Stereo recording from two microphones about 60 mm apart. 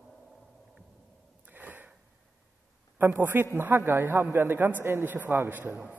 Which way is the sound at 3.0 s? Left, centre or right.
Right.